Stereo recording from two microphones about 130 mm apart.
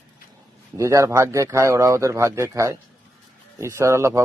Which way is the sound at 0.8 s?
25° right (ahead or behind).